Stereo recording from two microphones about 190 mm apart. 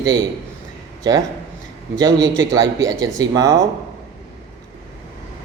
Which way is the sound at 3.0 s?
20° right (ahead or behind).